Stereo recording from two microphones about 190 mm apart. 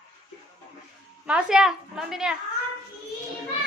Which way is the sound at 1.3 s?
5° right (ahead or behind).